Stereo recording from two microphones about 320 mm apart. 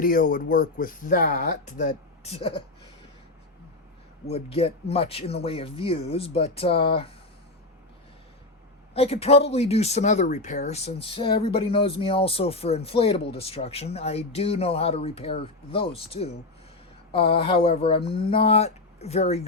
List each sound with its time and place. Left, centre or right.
0.0 s speech: left
4.3 s speech: centre
8.9 s speech: centre